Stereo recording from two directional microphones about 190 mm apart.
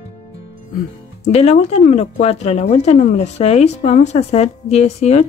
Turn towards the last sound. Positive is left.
turn(degrees=35)  # may be behind; listen again after turning